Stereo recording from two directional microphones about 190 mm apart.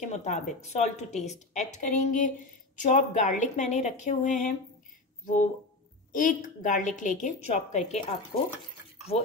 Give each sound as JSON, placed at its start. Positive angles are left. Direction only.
{"t": 0.0, "sound": "a woman's voice", "side_deg": 40}